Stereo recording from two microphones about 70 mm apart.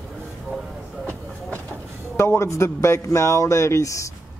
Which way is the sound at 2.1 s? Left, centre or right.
Left.